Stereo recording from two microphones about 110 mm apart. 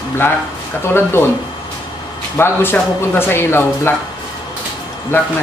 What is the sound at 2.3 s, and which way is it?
A man's voice, 20° left (ahead or behind).